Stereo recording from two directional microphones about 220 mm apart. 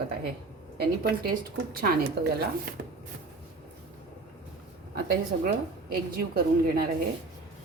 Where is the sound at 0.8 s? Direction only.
45° right (ahead or behind).